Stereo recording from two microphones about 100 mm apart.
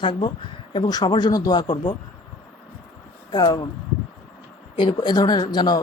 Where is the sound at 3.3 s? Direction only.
45° left (ahead or behind).